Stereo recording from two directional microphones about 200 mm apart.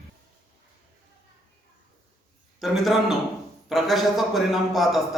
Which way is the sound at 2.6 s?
Centre (ahead or behind).